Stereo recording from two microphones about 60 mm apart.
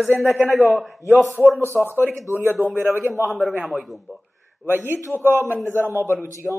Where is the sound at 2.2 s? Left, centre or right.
Right.